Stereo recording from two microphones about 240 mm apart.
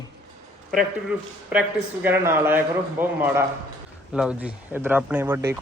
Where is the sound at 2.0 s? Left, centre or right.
Centre.